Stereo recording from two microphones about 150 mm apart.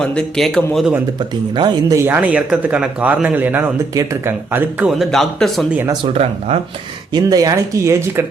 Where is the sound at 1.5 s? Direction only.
30° right (ahead or behind).